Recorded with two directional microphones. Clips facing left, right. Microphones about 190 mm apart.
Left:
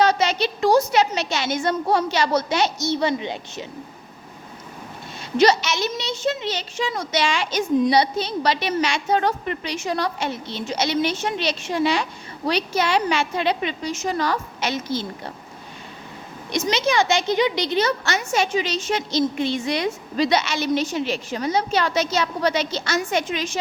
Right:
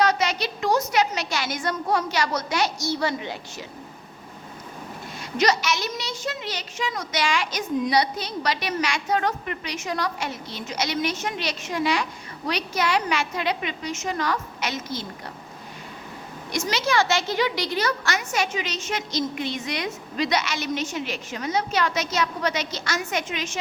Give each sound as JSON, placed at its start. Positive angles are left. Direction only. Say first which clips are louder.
{"t": 0.0, "sound": "speech", "louder": "left 3 dB", "side_deg": 25}
{"t": 5.4, "sound": "speech", "louder": "left 5 dB", "side_deg": 25}
{"t": 16.5, "sound": "speech", "louder": "left 3 dB", "side_deg": 20}